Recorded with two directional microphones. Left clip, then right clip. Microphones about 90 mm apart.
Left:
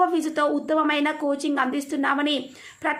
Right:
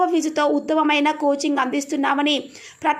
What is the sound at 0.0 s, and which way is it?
A woman's voice, 25° right (ahead or behind).